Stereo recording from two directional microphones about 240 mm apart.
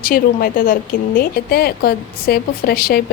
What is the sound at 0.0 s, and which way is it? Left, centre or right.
Speech, left.